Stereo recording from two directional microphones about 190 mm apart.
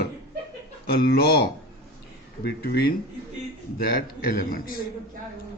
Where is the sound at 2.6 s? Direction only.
55° left (ahead or behind).